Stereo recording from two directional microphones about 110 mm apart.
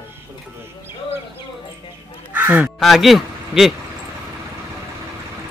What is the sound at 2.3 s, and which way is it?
Speech, 15° right (ahead or behind).